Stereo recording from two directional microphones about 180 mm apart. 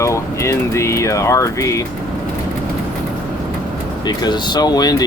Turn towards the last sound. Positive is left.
turn(degrees=20)  # may be behind; listen again after turning